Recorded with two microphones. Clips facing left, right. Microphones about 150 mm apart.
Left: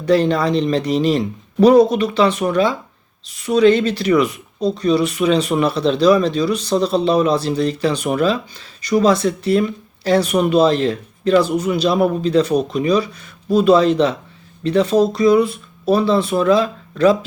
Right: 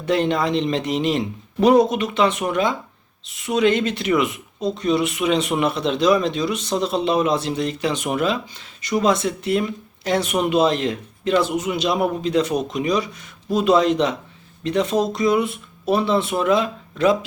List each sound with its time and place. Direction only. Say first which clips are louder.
0.0 s speech: left 4 dB; 20° right (ahead or behind)